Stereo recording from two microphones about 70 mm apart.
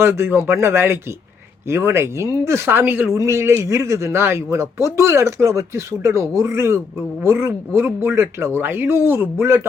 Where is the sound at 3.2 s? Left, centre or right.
Right.